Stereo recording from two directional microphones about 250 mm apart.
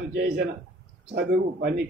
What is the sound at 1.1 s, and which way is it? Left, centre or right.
Speech, right.